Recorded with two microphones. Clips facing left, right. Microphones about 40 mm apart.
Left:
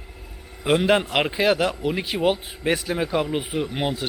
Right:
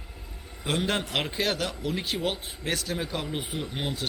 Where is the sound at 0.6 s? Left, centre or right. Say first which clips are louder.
Left 9 dB; centre.